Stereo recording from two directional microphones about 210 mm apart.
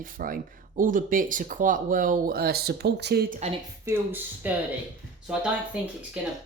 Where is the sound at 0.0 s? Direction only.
40° right (ahead or behind).